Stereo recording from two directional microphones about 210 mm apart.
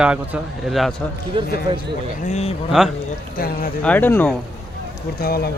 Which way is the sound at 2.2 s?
30° left (ahead or behind).